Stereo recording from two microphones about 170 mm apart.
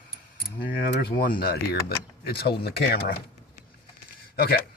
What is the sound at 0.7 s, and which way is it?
Speech, 65° left (ahead or behind).